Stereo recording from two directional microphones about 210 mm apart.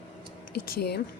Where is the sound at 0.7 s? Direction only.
50° left (ahead or behind).